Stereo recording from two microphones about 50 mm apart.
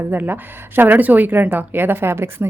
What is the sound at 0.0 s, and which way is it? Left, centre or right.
A woman's voice, right.